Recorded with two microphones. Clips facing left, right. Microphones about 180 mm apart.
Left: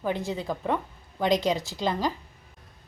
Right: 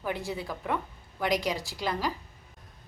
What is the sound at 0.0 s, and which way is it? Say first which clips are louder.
A woman's voice: left 4 dB; 20° left (ahead or behind).